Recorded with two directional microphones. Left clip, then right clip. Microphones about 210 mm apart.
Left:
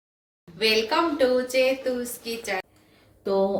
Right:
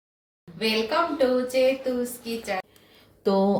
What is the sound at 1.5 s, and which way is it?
A woman's voice, 5° left (ahead or behind).